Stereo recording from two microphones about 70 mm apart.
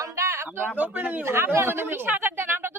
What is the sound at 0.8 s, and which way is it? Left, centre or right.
Speech, right.